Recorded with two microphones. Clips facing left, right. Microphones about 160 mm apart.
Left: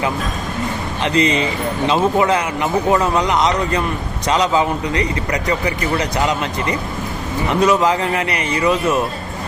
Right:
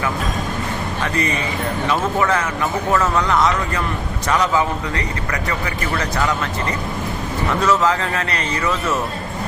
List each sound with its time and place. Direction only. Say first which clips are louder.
1.0 s a man's voice: left 7 dB; 20° left (ahead or behind)